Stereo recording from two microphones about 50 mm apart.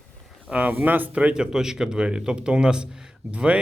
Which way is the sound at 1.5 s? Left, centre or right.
Centre.